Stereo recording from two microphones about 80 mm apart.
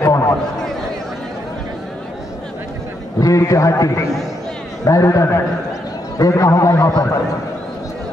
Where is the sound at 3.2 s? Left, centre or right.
Left.